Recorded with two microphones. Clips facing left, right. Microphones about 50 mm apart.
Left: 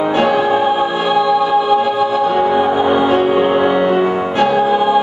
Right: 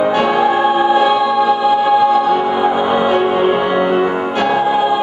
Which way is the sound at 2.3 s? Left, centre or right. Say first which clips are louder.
Left 1 dB; centre.